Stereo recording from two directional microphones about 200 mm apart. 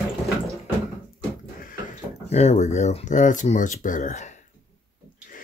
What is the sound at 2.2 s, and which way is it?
Speech, 35° left (ahead or behind).